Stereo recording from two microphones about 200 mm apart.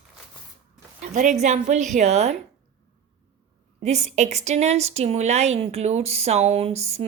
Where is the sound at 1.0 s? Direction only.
35° right (ahead or behind).